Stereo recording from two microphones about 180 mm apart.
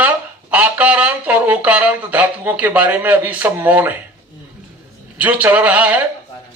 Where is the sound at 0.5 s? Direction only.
10° right (ahead or behind).